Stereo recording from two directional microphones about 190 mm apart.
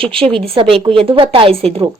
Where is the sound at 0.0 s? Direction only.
30° right (ahead or behind).